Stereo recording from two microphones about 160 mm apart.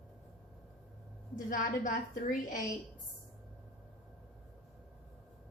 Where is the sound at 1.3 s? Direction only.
55° left (ahead or behind).